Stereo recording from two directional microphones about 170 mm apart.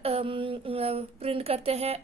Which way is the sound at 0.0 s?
35° right (ahead or behind).